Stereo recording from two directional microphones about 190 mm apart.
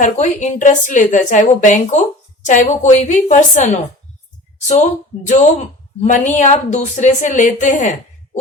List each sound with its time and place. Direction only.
0.0 s speech: 40° left (ahead or behind)
4.7 s speech: 40° left (ahead or behind)